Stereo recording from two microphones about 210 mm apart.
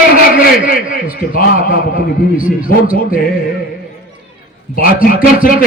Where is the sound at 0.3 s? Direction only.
40° left (ahead or behind).